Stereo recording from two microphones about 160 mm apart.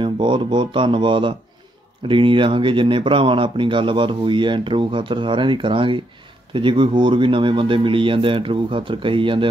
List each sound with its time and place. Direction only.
0.0 s speech: 30° right (ahead or behind)